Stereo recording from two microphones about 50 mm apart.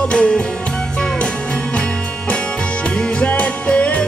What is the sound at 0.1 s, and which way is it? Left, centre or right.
Music, centre.